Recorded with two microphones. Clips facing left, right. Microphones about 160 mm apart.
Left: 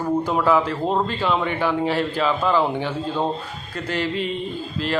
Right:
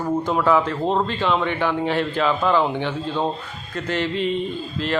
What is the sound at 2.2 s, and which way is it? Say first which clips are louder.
Speech: right 1 dB; 5° left (ahead or behind).